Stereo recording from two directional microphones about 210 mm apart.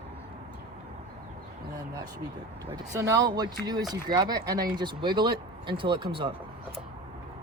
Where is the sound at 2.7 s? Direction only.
15° right (ahead or behind).